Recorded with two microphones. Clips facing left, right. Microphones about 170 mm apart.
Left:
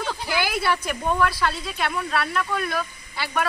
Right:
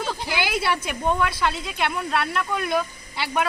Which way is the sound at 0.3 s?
20° right (ahead or behind).